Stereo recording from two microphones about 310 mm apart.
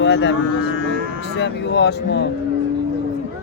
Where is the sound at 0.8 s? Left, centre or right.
Right.